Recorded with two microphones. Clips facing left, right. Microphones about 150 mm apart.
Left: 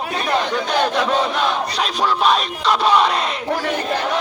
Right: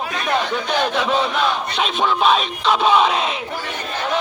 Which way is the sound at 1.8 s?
Centre (ahead or behind).